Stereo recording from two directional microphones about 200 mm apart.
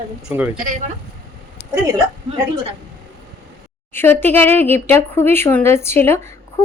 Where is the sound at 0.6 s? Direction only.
40° right (ahead or behind).